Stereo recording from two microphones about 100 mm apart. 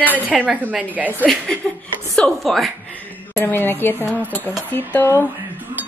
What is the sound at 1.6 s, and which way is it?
A woman's voice, 5° left (ahead or behind).